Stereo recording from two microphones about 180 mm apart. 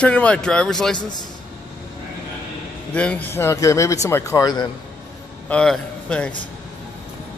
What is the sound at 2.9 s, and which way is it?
Speech, 5° left (ahead or behind).